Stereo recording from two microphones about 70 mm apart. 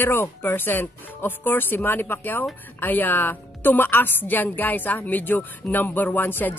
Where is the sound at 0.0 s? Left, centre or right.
Left.